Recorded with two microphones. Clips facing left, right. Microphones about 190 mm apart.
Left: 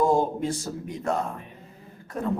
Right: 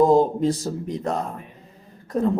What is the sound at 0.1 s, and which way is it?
A man's voice, 35° right (ahead or behind).